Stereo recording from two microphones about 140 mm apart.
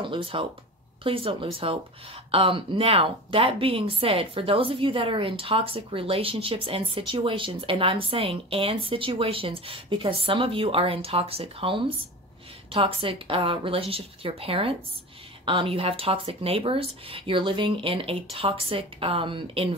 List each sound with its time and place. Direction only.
0.0 s a woman's voice: 40° right (ahead or behind)